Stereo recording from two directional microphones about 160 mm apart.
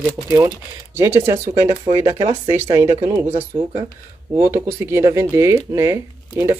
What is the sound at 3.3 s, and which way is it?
Speech, 40° right (ahead or behind).